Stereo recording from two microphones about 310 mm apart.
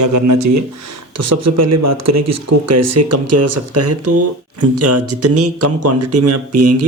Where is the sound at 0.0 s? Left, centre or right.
Right.